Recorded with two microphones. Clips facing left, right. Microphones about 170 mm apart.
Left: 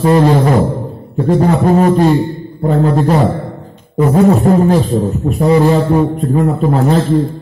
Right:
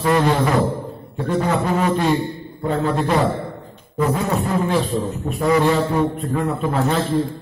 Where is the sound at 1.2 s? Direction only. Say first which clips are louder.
Left 8 dB; 40° left (ahead or behind).